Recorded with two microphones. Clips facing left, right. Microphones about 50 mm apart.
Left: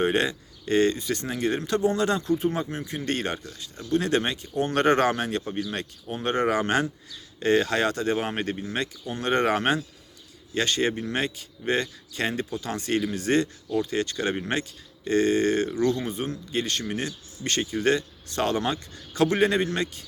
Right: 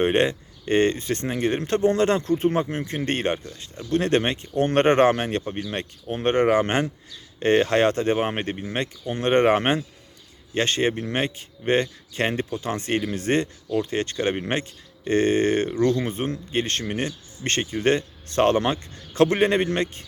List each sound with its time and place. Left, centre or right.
0.0 s speech: right
3.2 s speech: right
3.8 s speech: right